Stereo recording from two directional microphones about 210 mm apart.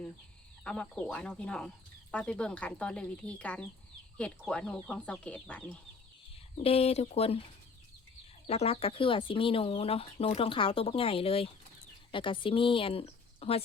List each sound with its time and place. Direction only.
0.6 s speech: 5° left (ahead or behind)
6.6 s speech: 30° left (ahead or behind)
8.4 s speech: 30° left (ahead or behind)